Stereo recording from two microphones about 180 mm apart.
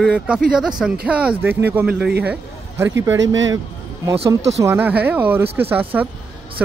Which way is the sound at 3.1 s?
90° right.